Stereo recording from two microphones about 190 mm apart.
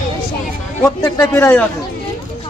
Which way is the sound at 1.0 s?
20° left (ahead or behind).